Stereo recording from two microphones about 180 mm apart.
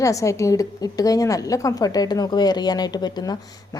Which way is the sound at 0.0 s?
20° left (ahead or behind).